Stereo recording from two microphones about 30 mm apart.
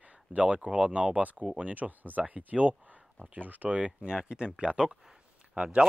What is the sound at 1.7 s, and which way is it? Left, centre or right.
Speech, right.